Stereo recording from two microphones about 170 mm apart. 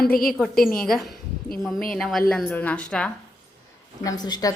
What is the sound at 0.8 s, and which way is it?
A woman's voice, centre (ahead or behind).